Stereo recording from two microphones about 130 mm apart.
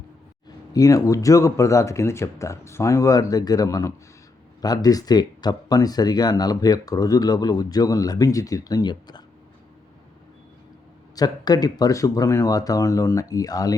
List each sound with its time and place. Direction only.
0.7 s speech: 25° left (ahead or behind)
11.1 s speech: 30° left (ahead or behind)